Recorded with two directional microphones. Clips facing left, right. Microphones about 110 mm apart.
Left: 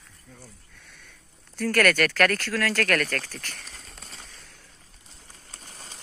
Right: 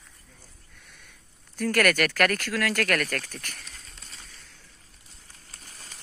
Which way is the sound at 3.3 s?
35° left (ahead or behind).